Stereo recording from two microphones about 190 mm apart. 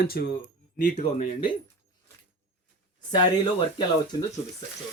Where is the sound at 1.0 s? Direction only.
30° left (ahead or behind).